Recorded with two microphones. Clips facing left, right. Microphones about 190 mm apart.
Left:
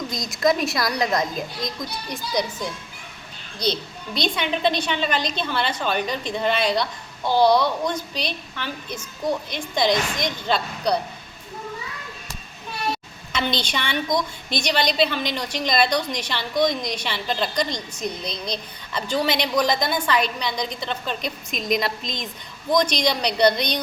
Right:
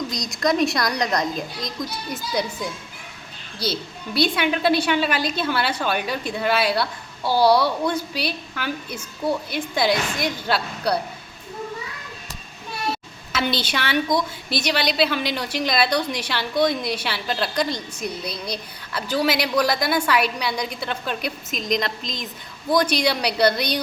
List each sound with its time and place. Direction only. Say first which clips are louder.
0.1 s a woman's voice: left 4 dB; centre (ahead or behind)
13.3 s a woman's voice: right 1 dB; 5° right (ahead or behind)